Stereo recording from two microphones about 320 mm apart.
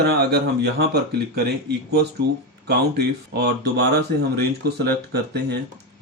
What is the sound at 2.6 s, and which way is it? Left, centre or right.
Speech, right.